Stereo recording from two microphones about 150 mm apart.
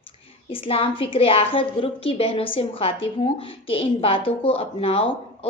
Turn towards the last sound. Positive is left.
turn(degrees=40)  # may be behind; listen again after turning